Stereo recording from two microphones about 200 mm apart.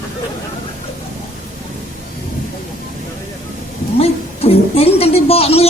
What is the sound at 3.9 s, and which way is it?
A woman's voice, 30° left (ahead or behind).